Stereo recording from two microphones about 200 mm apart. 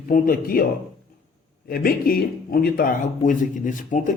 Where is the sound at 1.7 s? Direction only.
45° left (ahead or behind).